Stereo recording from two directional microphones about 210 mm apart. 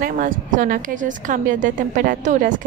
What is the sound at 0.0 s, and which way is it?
A woman's voice, 40° right (ahead or behind).